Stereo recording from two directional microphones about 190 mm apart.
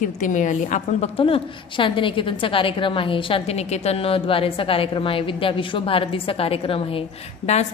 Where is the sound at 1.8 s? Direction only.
25° left (ahead or behind).